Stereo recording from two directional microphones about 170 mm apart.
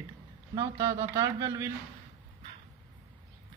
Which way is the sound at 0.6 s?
20° right (ahead or behind).